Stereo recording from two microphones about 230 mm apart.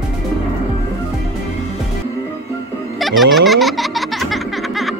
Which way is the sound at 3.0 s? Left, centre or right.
Centre.